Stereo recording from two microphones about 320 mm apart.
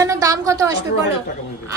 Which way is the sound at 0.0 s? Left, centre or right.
Centre.